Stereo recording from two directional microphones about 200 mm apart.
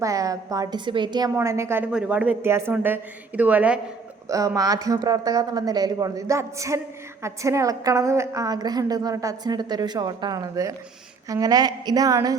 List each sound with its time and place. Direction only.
0.0 s speech: 15° right (ahead or behind)